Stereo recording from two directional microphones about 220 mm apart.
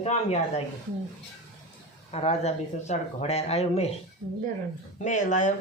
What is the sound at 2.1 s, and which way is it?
Speech, 30° left (ahead or behind).